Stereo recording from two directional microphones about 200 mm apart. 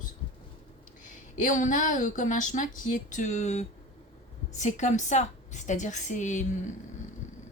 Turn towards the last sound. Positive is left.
turn(degrees=40)  # may be behind; listen again after turning